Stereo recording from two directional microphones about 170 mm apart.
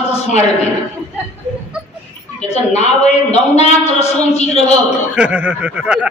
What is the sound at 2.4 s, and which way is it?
A man's voice, 40° left (ahead or behind).